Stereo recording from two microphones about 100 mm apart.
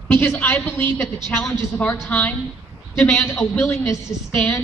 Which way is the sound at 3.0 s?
10° left (ahead or behind).